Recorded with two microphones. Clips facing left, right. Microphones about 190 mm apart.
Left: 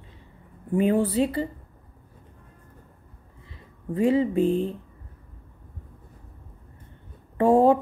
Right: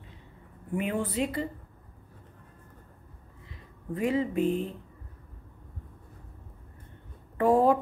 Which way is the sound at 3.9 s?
30° left (ahead or behind).